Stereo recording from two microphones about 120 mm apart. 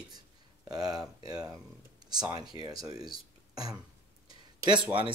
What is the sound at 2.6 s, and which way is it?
Speech, 30° right (ahead or behind).